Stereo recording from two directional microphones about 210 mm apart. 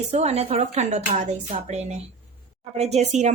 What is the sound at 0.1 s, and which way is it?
A woman's voice, 30° right (ahead or behind).